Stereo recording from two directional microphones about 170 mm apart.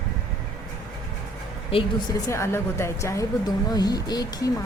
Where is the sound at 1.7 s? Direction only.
30° left (ahead or behind).